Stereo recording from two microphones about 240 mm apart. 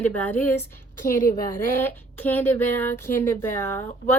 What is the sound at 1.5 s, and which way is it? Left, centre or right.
Speech, centre.